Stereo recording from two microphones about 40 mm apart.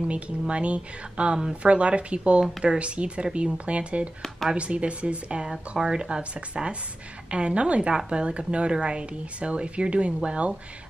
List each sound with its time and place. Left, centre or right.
0.1 s speech: right